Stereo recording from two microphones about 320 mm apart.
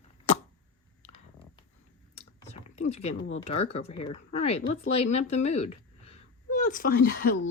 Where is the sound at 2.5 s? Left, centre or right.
Left.